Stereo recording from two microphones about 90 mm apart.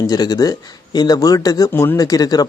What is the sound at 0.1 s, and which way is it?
Speech, 45° left (ahead or behind).